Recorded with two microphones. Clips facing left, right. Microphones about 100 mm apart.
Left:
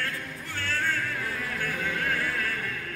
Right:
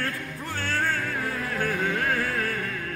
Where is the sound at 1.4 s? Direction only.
45° right (ahead or behind).